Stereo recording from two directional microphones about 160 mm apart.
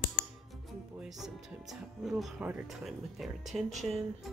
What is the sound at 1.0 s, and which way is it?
Speech, centre (ahead or behind).